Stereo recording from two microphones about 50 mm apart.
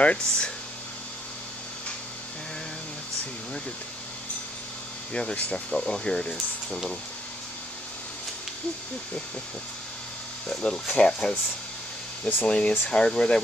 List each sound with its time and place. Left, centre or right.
0.0 s speech: left
5.1 s speech: left; by 7.0 s centre
10.6 s speech: centre
12.4 s speech: left